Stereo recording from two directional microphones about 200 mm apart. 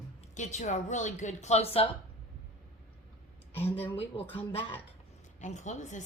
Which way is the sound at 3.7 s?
30° left (ahead or behind).